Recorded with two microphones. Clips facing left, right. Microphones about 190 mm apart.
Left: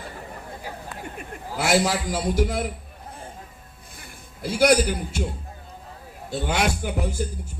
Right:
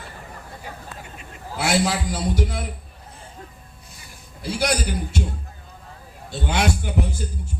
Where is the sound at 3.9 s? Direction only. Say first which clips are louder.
Left 3 dB; 55° left (ahead or behind).